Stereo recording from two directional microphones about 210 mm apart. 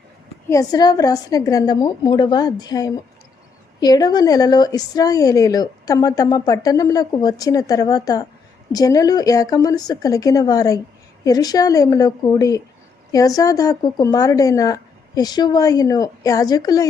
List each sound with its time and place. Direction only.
0.5 s a woman's voice: 20° left (ahead or behind)